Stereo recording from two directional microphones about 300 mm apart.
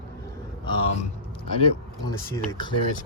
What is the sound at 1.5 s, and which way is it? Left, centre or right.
Speech, centre.